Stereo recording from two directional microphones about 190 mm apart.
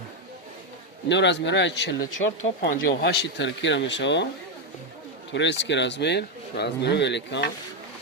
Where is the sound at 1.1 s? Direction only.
70° left (ahead or behind).